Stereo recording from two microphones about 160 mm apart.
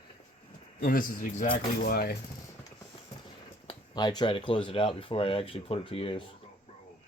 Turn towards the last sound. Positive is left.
turn(degrees=35)  # may be behind; listen again after turning